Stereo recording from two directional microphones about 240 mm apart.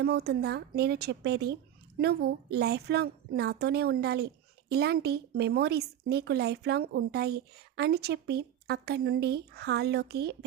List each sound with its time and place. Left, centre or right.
0.0 s a woman's voice: right